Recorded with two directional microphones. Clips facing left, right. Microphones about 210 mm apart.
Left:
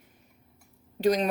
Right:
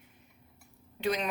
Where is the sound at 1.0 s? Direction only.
40° left (ahead or behind).